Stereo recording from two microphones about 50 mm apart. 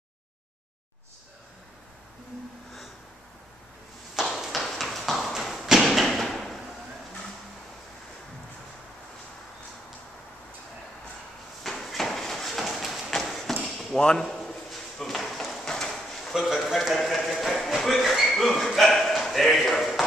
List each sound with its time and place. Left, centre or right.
4.1 s tap: centre
5.8 s thump: centre
11.6 s clip-clop: centre
13.2 s a sound: centre
14.0 s a man's voice: centre
15.0 s a sound: centre
15.9 s drawer open or close: centre
16.3 s a man's voice: centre
16.9 s a sound: centre